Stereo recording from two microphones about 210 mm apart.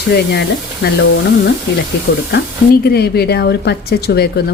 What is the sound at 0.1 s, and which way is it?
A woman's voice, 50° left (ahead or behind).